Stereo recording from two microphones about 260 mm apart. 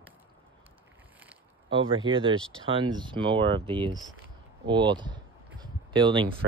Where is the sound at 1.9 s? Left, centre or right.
Centre.